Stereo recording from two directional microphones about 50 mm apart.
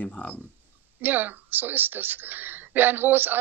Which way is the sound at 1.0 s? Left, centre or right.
Right.